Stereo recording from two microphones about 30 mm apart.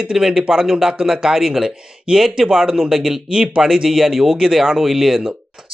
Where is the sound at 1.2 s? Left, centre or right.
Centre.